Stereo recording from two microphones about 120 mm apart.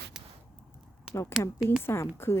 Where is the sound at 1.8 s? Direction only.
20° left (ahead or behind).